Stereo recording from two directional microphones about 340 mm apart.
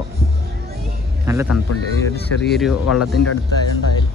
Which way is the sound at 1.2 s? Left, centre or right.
Centre.